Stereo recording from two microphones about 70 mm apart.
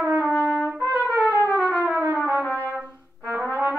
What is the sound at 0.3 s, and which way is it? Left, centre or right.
Trumpet, left.